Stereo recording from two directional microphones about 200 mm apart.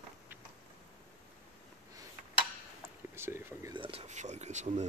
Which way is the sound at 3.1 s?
10° right (ahead or behind).